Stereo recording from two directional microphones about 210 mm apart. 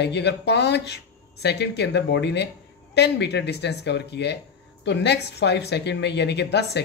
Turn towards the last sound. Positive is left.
turn(degrees=55)  # may be behind; listen again after turning